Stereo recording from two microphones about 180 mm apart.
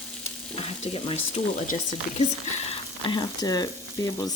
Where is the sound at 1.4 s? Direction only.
40° left (ahead or behind).